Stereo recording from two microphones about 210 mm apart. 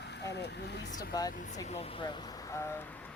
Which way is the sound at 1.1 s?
15° left (ahead or behind).